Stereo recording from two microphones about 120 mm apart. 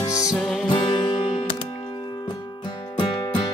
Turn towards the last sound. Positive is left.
turn(degrees=35)  # may be behind; listen again after turning